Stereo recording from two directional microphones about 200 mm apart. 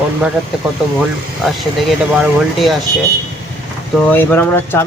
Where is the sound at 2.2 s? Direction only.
Centre (ahead or behind).